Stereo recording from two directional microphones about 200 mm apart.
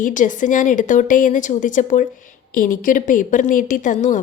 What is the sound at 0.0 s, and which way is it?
Speech, 40° left (ahead or behind).